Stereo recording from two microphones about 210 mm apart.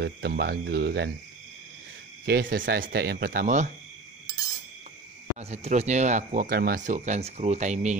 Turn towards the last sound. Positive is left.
turn(degrees=-35)  # may be behind; listen again after turning